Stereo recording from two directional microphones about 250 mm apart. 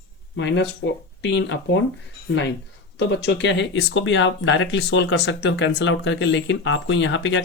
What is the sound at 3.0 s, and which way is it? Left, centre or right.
Speech, left.